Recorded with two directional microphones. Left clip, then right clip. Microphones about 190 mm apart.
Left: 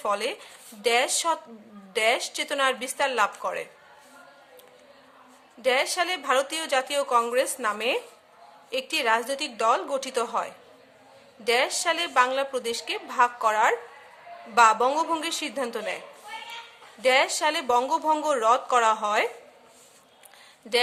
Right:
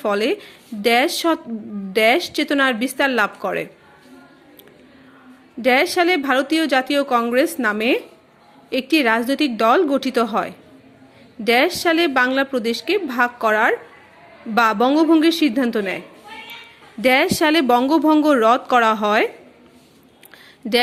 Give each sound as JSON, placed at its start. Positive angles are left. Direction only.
{"t": 0.0, "sound": "a woman's voice", "side_deg": -20}
{"t": 5.6, "sound": "a woman's voice", "side_deg": -20}
{"t": 17.0, "sound": "a woman's voice", "side_deg": -25}